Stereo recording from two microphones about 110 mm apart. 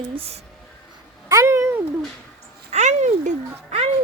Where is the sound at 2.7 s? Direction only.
90° right.